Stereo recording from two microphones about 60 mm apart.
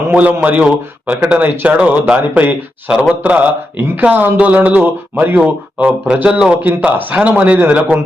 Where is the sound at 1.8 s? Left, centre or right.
Right.